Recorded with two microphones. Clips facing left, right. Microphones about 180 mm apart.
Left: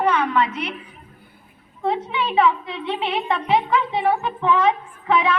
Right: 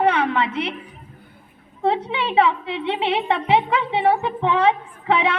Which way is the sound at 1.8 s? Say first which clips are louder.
Right 2 dB; 35° right (ahead or behind).